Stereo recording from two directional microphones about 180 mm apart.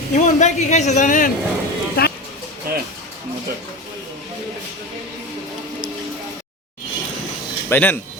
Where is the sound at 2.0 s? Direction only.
60° left (ahead or behind).